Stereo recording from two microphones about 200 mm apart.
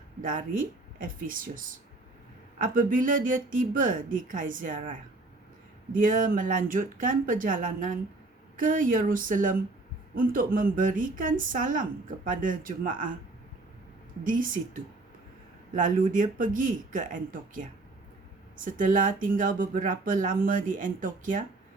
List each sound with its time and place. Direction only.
0.2 s a woman's voice: 40° right (ahead or behind)
14.3 s a woman's voice: 40° right (ahead or behind)